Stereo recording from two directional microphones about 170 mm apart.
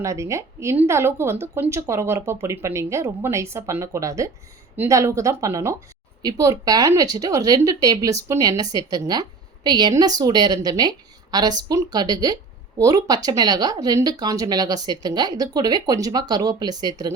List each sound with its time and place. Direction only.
0.0 s a woman's voice: 15° right (ahead or behind)